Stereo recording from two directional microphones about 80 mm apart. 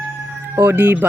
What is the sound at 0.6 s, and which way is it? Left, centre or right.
Speech, right.